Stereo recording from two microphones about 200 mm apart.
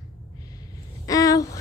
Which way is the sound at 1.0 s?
15° left (ahead or behind).